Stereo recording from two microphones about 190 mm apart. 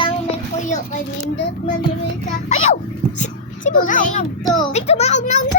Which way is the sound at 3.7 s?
45° left (ahead or behind).